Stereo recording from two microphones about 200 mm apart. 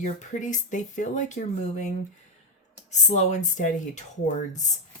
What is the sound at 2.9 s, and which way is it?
Speech, 35° left (ahead or behind).